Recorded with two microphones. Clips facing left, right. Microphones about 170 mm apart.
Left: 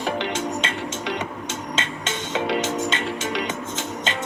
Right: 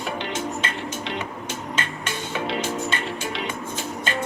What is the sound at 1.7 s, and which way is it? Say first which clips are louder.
Music: left 2 dB; 25° left (ahead or behind).